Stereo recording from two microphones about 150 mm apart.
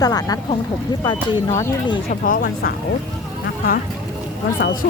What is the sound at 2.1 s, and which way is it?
Speech, 75° left (ahead or behind).